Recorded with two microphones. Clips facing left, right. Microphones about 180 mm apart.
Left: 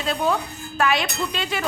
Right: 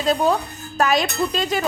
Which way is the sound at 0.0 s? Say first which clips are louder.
Right 4 dB; 40° right (ahead or behind).